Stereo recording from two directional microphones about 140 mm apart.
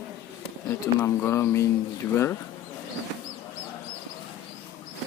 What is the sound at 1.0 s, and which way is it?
Speech, 20° left (ahead or behind).